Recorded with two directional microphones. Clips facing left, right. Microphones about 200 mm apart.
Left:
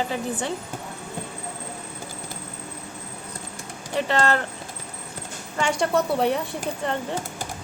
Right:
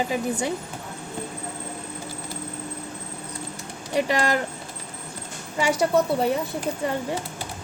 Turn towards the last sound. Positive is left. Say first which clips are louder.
# right 1 dB
turn(degrees=-10)  # may be behind; listen again after turning